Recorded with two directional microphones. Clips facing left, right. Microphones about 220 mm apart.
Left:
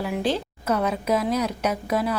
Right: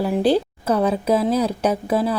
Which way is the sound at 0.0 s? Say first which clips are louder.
Right 7 dB; 35° right (ahead or behind).